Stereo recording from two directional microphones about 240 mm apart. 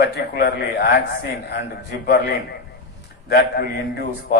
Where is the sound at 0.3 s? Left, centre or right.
Left.